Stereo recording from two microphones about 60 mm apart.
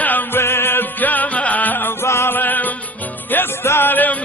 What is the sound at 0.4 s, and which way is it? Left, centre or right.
Music, left.